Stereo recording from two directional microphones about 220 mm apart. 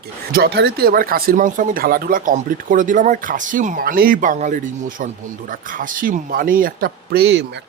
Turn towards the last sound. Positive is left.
turn(degrees=-50)  # may be behind; listen again after turning